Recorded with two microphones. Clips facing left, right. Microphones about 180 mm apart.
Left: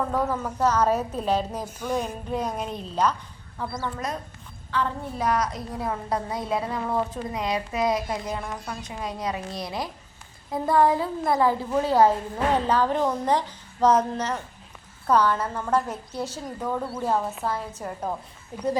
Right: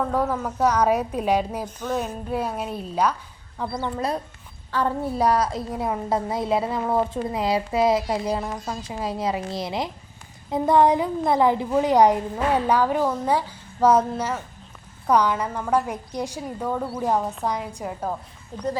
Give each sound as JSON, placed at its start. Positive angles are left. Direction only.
{"t": 0.1, "sound": "a woman's voice", "side_deg": -10}
{"t": 1.6, "sound": "speech", "side_deg": 10}
{"t": 2.0, "sound": "a woman's voice", "side_deg": -5}
{"t": 3.8, "sound": "a woman's voice", "side_deg": -25}
{"t": 4.7, "sound": "a woman's voice", "side_deg": -40}
{"t": 18.5, "sound": "speech", "side_deg": 10}